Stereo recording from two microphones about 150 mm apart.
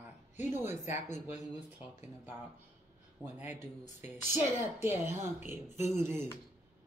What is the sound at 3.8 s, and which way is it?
Speech, 50° left (ahead or behind).